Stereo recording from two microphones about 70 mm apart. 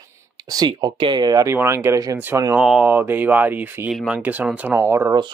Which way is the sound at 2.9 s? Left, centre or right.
Right.